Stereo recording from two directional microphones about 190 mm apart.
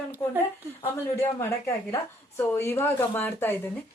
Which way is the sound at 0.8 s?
15° left (ahead or behind).